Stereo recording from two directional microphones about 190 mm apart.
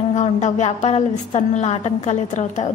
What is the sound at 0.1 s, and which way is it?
A woman's voice, 40° left (ahead or behind).